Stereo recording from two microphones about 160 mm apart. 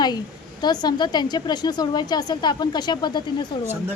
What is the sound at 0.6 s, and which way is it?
A woman's voice, 25° left (ahead or behind).